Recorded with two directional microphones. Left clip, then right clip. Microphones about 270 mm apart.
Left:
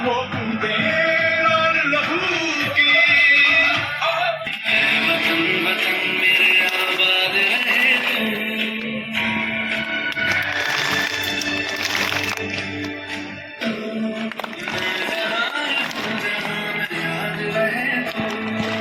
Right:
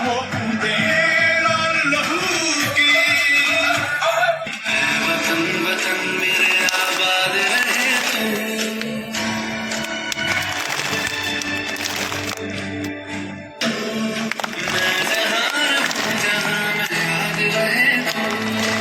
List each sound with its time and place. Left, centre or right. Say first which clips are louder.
1.5 s music: left 1 dB; right
4.7 s music: left 2 dB; right